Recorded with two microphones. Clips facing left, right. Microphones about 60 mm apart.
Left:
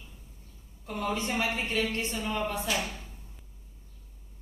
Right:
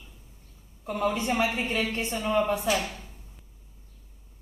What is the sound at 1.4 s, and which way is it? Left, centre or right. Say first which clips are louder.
Speech: right 3 dB; right.